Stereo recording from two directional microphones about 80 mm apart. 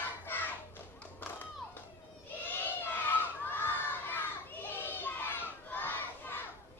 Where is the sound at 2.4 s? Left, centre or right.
Left.